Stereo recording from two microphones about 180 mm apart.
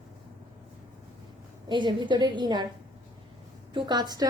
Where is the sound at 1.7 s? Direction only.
25° right (ahead or behind).